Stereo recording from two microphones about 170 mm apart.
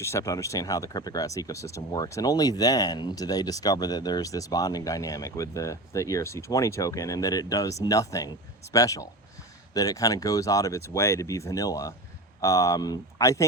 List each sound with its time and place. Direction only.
0.0 s speech: 15° left (ahead or behind)